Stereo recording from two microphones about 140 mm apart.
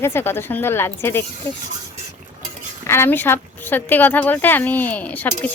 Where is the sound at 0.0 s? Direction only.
15° left (ahead or behind).